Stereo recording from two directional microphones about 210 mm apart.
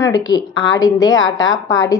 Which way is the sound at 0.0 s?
20° left (ahead or behind).